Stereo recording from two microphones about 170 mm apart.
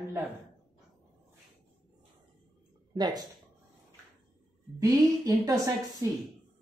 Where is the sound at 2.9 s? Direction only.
25° right (ahead or behind).